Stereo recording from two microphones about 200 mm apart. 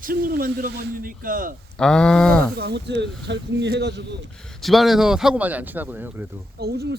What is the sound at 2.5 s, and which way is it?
Speech, 55° right (ahead or behind).